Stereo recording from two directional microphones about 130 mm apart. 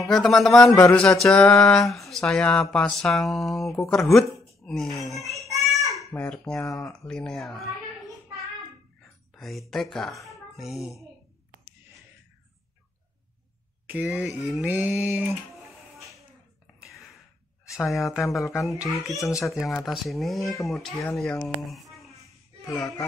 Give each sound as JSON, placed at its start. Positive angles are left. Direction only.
{"t": 0.0, "sound": "speech", "side_deg": 5}
{"t": 6.1, "sound": "a child's voice", "side_deg": 5}
{"t": 9.3, "sound": "speech", "side_deg": 0}
{"t": 13.8, "sound": "speech", "side_deg": -10}
{"t": 14.7, "sound": "speech", "side_deg": -10}
{"t": 16.8, "sound": "a sound", "side_deg": 0}
{"t": 17.6, "sound": "speech", "side_deg": 0}
{"t": 22.7, "sound": "speech", "side_deg": 25}